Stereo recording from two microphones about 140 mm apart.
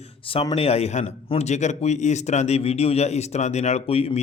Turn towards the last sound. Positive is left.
turn(degrees=45)  # may be behind; listen again after turning